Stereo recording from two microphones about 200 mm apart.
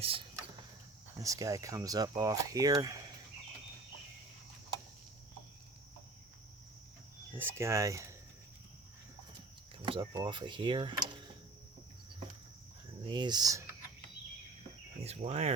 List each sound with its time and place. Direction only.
1.2 s speech: 15° right (ahead or behind)
7.3 s speech: 10° right (ahead or behind)
9.8 s speech: 25° right (ahead or behind)
13.1 s speech: 20° right (ahead or behind)
15.0 s speech: 35° right (ahead or behind)